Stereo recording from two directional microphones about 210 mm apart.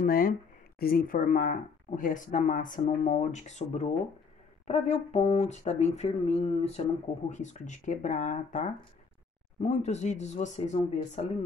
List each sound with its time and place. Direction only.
0.0 s speech: 45° left (ahead or behind)